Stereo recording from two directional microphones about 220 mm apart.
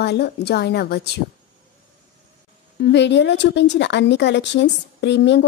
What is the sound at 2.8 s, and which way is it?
Speech, 50° left (ahead or behind).